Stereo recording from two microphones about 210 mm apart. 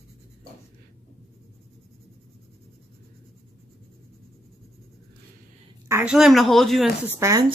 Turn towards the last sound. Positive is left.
turn(degrees=-15)  # may be behind; listen again after turning